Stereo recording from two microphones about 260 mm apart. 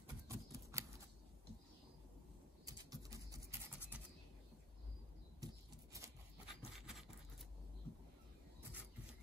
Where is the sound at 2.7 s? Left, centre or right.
Centre.